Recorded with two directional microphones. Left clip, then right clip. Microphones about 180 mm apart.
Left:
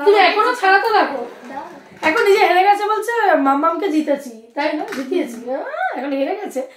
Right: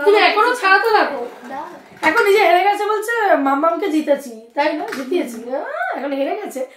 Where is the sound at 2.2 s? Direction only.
15° left (ahead or behind).